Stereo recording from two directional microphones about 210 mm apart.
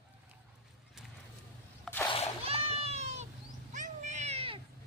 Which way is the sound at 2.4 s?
30° right (ahead or behind).